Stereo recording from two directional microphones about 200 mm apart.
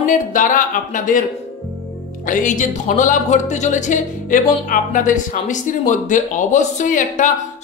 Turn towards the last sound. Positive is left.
turn(degrees=40)  # may be behind; listen again after turning